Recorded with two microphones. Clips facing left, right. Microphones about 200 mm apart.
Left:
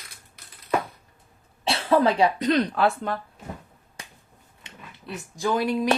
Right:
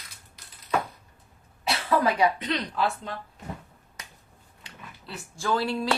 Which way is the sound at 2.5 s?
55° left (ahead or behind).